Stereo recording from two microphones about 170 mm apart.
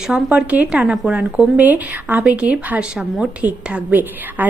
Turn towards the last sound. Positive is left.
turn(degrees=-10)  # may be behind; listen again after turning